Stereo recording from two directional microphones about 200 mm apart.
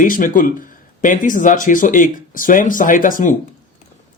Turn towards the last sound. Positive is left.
turn(degrees=40)  # may be behind; listen again after turning